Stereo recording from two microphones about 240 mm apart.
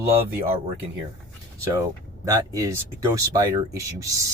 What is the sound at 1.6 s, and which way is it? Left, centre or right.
Speech, centre.